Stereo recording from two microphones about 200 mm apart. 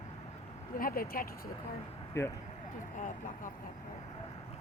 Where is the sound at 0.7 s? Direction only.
45° left (ahead or behind).